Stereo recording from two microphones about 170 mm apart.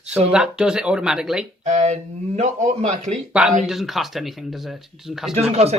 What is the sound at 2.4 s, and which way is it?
Speech, 40° right (ahead or behind).